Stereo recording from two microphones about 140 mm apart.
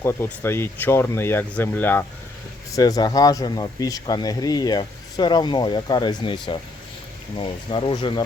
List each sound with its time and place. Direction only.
0.0 s speech: 15° left (ahead or behind)
2.7 s speech: 25° left (ahead or behind)